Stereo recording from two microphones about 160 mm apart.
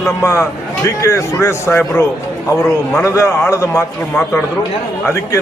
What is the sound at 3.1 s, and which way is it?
Speech, 20° left (ahead or behind).